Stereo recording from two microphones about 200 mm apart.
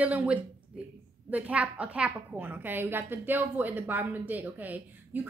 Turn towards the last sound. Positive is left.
turn(degrees=-10)  # may be behind; listen again after turning